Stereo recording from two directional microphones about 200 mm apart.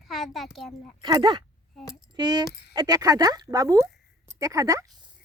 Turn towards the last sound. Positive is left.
turn(degrees=-15)  # may be behind; listen again after turning